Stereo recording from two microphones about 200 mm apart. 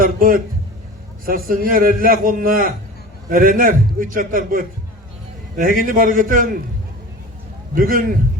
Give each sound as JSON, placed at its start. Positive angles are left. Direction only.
{"t": 0.0, "sound": "a sound", "side_deg": -45}
{"t": 1.2, "sound": "a man's voice", "side_deg": -45}
{"t": 7.8, "sound": "a man's voice", "side_deg": -45}